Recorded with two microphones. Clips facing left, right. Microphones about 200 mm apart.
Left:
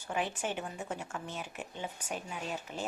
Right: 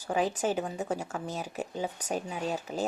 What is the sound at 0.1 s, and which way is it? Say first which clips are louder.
Speech: right 7 dB; 35° right (ahead or behind).